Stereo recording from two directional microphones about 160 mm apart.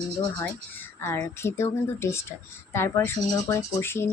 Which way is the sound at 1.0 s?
15° left (ahead or behind).